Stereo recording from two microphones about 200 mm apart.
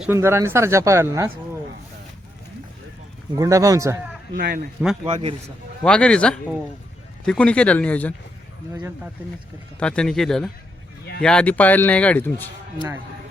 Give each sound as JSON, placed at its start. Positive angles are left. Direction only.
{"t": 0.0, "sound": "speech", "side_deg": -10}
{"t": 3.3, "sound": "speech", "side_deg": -15}
{"t": 4.4, "sound": "a man's voice", "side_deg": -55}
{"t": 5.0, "sound": "a man's voice", "side_deg": -30}
{"t": 5.8, "sound": "speech", "side_deg": 5}
{"t": 9.8, "sound": "speech", "side_deg": 5}